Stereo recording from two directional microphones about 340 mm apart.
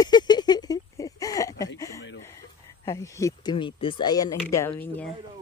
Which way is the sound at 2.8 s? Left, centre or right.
Centre.